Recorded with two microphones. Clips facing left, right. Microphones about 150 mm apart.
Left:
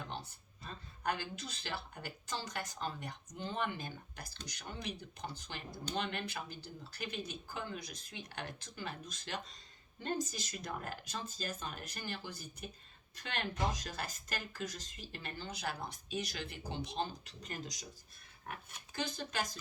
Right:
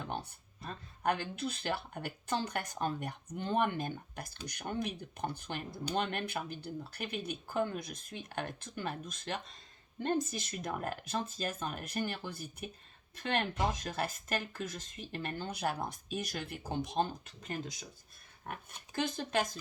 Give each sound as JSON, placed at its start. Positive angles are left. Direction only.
{"t": 0.1, "sound": "speech", "side_deg": -55}
{"t": 18.9, "sound": "speech", "side_deg": -50}